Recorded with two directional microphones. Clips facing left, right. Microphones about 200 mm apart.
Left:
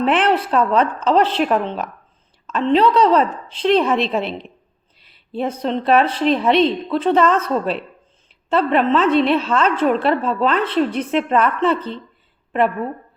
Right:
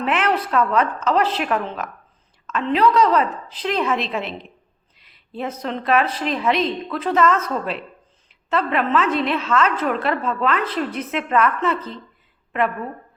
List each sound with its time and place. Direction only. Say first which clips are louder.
0.0 s a woman's voice: left 4 dB; 30° left (ahead or behind)
5.3 s a woman's voice: left 5 dB; 30° left (ahead or behind)